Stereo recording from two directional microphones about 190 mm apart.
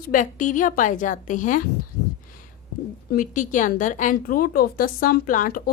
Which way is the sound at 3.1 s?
45° left (ahead or behind).